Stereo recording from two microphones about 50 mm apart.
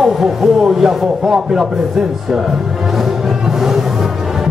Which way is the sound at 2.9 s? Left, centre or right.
Centre.